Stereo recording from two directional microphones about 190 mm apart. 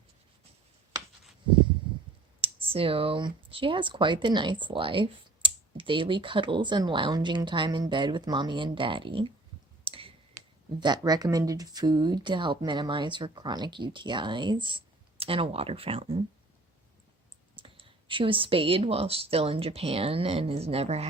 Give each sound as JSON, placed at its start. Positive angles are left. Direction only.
{"t": 2.4, "sound": "speech", "side_deg": -30}
{"t": 9.8, "sound": "clicking", "side_deg": -30}
{"t": 10.8, "sound": "speech", "side_deg": -20}
{"t": 17.6, "sound": "speech", "side_deg": -30}